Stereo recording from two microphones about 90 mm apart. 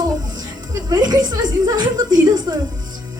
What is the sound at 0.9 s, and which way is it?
A woman's voice, 50° right (ahead or behind).